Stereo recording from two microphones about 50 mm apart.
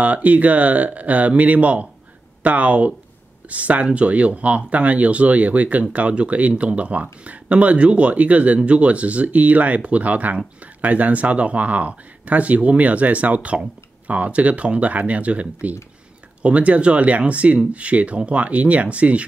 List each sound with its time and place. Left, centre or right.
0.0 s speech: right